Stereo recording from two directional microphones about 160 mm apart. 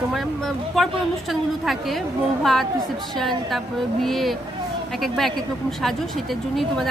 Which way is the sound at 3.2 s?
Centre (ahead or behind).